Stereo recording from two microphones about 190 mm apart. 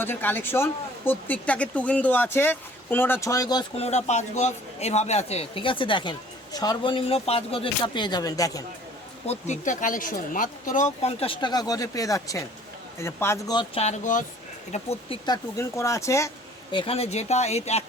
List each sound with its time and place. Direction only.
0.0 s speech: 10° left (ahead or behind)
3.8 s speech: 35° left (ahead or behind); by 8.6 s 20° left (ahead or behind)
9.2 s speech: 35° left (ahead or behind)
13.8 s speech: 40° left (ahead or behind)
14.7 s speech: 30° left (ahead or behind)
15.5 s speech: 15° left (ahead or behind)
16.7 s speech: 30° left (ahead or behind)